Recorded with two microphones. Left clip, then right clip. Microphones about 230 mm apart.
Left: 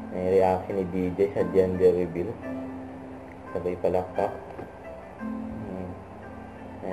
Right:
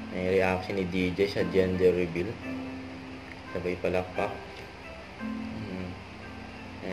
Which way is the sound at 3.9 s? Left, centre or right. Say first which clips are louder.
Left 4 dB; right.